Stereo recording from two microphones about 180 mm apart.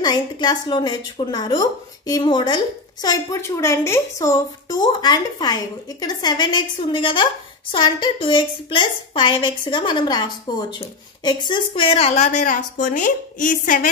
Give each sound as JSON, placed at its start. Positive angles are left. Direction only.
{"t": 0.0, "sound": "a woman's voice", "side_deg": 25}